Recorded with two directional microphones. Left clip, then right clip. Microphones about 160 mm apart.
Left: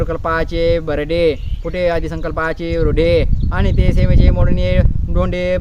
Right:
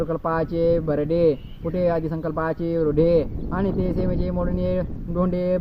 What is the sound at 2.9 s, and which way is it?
Speech, 50° left (ahead or behind).